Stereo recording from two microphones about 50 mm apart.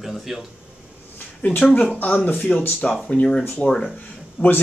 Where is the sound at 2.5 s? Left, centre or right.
Centre.